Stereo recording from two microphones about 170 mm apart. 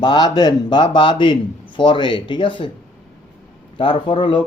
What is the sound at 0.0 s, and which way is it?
A man's voice, 25° left (ahead or behind).